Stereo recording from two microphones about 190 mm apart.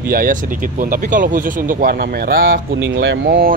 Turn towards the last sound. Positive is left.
turn(degrees=-55)  # may be behind; listen again after turning